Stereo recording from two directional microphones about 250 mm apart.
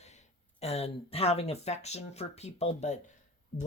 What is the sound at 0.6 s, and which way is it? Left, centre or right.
Speech, left.